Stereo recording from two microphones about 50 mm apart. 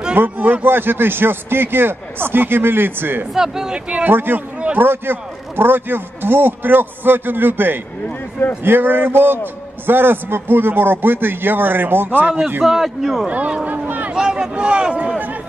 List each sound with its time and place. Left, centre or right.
0.4 s a man's voice: right
0.7 s a man's voice: right
3.3 s speech: centre
4.1 s a man's voice: right
12.6 s a man's voice: centre
13.3 s speech: right
13.7 s a sound: right
14.1 s speech: centre